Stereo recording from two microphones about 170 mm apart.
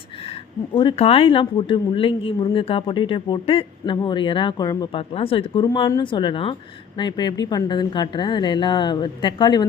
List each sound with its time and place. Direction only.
0.3 s a woman's voice: 30° left (ahead or behind)